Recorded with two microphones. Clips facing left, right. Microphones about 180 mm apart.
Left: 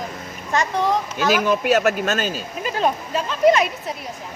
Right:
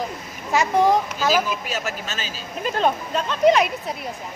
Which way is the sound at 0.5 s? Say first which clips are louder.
Right 3 dB; 10° right (ahead or behind).